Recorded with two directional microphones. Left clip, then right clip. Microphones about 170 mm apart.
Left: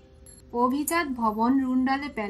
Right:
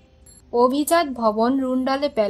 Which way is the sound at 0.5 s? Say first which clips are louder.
Right 7 dB; 50° right (ahead or behind).